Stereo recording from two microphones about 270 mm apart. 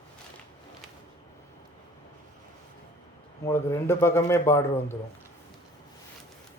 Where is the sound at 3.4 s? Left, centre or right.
Centre.